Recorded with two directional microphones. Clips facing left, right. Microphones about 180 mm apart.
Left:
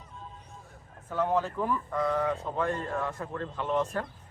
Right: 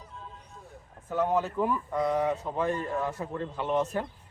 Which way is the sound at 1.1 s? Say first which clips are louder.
Right 1 dB; 15° right (ahead or behind).